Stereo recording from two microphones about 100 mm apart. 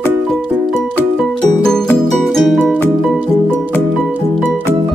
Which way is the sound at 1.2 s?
5° left (ahead or behind).